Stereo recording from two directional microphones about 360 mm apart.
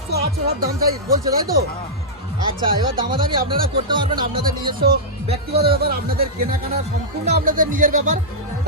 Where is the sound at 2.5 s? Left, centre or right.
Centre.